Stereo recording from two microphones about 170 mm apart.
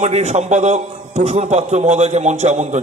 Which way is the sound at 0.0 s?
40° right (ahead or behind).